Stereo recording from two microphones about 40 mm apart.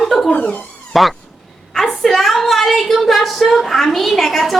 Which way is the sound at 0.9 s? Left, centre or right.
Centre.